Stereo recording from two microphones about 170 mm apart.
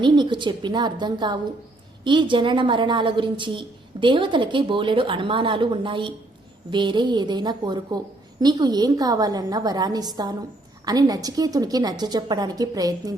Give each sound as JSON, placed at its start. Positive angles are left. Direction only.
{"t": 0.0, "sound": "a woman's voice", "side_deg": -25}